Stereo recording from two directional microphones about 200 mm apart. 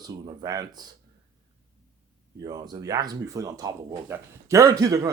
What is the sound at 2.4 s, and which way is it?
Speech, 20° right (ahead or behind).